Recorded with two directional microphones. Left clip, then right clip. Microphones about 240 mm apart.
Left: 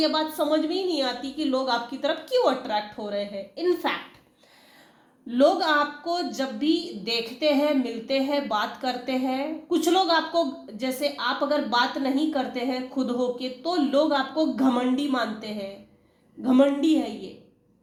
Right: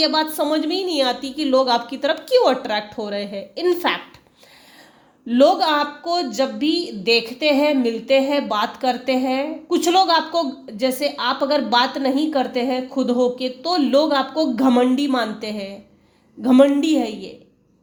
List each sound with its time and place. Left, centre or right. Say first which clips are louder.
0.0 s a woman's voice: right 5 dB; right
5.3 s a woman's voice: right 5 dB; right